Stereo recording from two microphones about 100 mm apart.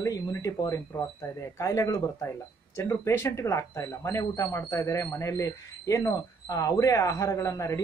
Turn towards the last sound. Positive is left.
turn(degrees=35)  # may be behind; listen again after turning